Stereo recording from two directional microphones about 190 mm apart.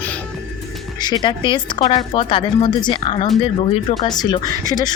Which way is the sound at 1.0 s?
20° left (ahead or behind).